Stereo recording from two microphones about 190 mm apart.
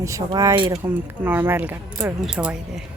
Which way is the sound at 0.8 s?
10° right (ahead or behind).